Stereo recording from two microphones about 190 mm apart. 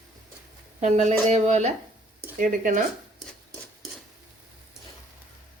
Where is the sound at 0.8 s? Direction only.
35° right (ahead or behind).